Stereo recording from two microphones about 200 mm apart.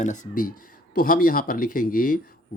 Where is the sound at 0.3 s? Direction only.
45° left (ahead or behind).